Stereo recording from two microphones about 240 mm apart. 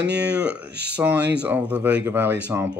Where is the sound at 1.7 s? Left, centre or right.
Centre.